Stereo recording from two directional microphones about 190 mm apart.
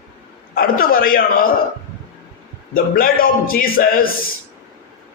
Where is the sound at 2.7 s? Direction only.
50° left (ahead or behind).